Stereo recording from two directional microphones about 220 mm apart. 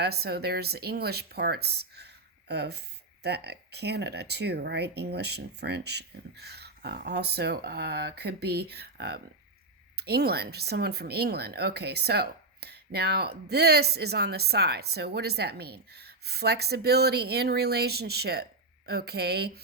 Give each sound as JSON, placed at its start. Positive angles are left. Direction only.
{"t": 0.0, "sound": "speech", "side_deg": -45}